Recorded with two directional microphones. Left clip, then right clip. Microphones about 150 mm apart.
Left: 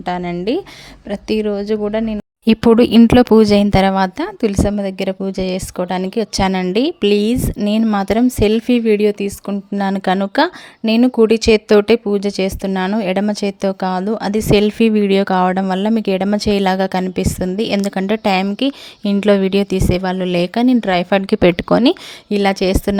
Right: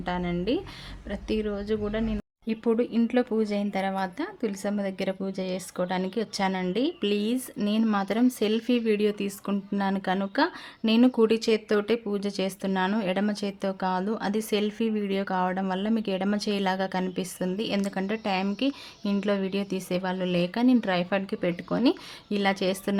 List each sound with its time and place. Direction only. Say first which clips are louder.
0.0 s a woman's voice: left 10 dB; 60° left (ahead or behind)
2.5 s a woman's voice: left 15 dB; 90° left; by 15.6 s 60° left (ahead or behind)
15.9 s a woman's voice: left 11 dB; 50° left (ahead or behind); by 18.4 s 65° left (ahead or behind)
18.5 s a woman's voice: left 10 dB; 55° left (ahead or behind)